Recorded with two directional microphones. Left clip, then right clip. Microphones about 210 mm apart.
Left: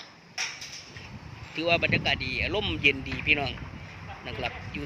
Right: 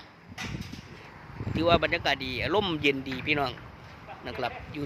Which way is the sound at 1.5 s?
15° right (ahead or behind).